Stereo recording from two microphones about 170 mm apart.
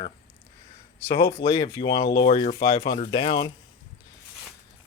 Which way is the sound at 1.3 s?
30° left (ahead or behind).